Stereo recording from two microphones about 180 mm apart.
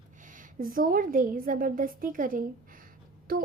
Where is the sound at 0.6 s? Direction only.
50° right (ahead or behind).